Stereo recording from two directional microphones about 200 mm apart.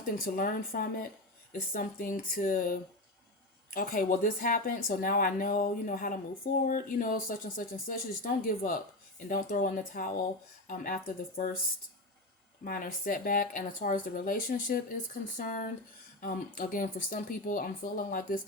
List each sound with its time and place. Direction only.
0.0 s speech: 45° left (ahead or behind)
12.6 s speech: 45° left (ahead or behind)